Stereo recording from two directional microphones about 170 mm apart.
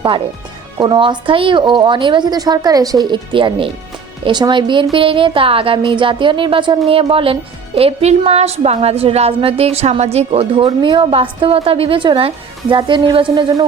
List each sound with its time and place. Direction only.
0.8 s a woman's voice: 30° right (ahead or behind)